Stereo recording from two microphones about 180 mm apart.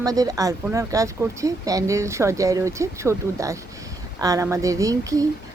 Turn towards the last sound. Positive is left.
turn(degrees=-20)  # may be behind; listen again after turning